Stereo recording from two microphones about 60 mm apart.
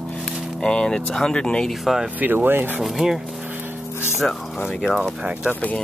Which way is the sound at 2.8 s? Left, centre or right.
Centre.